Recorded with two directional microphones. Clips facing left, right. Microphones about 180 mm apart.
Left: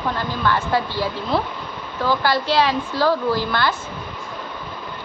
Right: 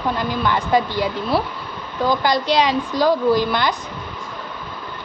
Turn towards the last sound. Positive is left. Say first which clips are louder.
# right 3 dB
turn(degrees=-15)  # may be behind; listen again after turning